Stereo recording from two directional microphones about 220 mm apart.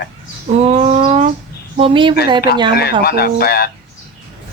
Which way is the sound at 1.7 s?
25° right (ahead or behind).